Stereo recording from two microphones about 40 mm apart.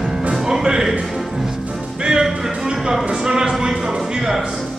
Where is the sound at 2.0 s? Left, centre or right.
Centre.